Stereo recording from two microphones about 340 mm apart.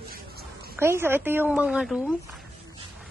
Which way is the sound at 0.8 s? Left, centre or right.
Centre.